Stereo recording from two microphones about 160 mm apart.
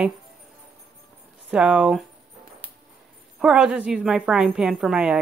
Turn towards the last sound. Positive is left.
turn(degrees=-5)  # may be behind; listen again after turning